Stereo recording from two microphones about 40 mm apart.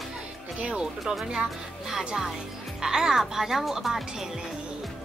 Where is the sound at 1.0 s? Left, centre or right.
Centre.